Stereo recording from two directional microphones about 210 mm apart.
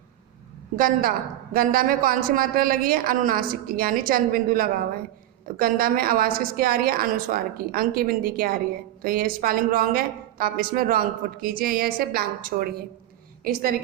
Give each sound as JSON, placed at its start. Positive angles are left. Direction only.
{"t": 0.8, "sound": "a woman's voice", "side_deg": -40}